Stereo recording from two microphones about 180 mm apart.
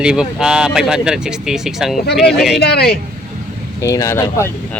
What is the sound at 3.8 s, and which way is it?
Speech, 15° left (ahead or behind).